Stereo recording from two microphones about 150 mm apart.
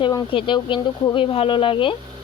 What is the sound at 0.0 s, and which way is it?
Speech, 30° left (ahead or behind).